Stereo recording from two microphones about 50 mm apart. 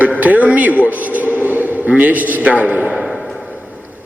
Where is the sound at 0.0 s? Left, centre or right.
Right.